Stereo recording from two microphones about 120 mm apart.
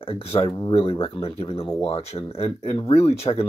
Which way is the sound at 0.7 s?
50° left (ahead or behind).